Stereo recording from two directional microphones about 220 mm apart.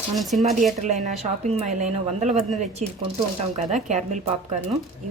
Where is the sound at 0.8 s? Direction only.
30° right (ahead or behind).